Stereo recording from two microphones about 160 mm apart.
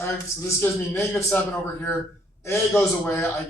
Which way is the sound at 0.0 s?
15° left (ahead or behind).